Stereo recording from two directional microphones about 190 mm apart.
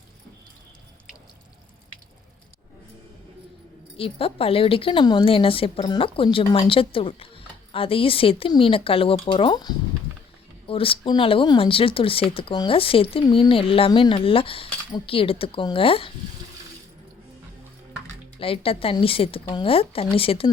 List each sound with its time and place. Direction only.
3.9 s a woman's voice: 30° left (ahead or behind)
18.3 s a woman's voice: 30° left (ahead or behind)